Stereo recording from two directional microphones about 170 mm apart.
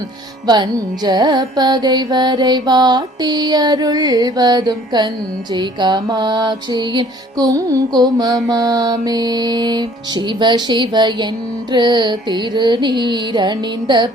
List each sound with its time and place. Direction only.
0.4 s carnatic music: 25° right (ahead or behind)